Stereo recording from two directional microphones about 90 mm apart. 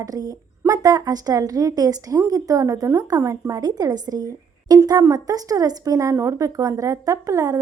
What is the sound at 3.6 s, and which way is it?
A woman's voice, 45° right (ahead or behind).